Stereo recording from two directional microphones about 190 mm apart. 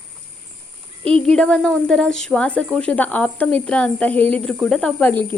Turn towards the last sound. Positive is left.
turn(degrees=10)  # may be behind; listen again after turning